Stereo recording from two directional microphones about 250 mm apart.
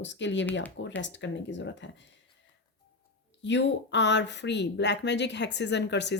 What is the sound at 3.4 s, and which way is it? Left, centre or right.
Speech, left.